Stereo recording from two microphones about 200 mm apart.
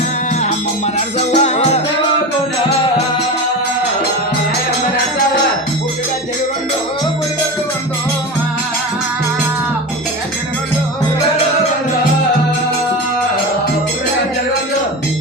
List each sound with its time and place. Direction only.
0.9 s music: 35° left (ahead or behind)